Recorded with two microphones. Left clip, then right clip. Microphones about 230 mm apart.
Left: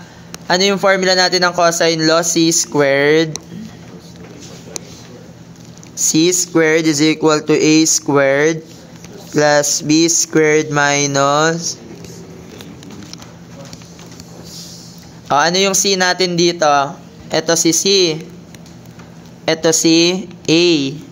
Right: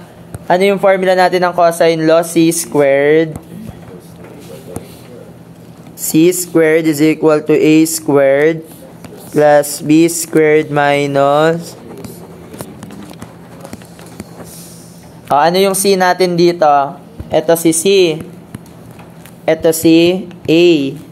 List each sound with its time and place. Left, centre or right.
0.5 s speech: centre
6.5 s speech: centre
15.2 s speech: centre
19.4 s a woman's voice: centre
19.8 s a woman's voice: left